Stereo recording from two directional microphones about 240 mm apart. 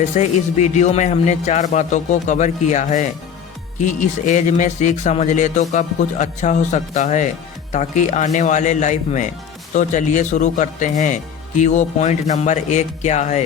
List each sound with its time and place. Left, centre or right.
0.0 s speech: left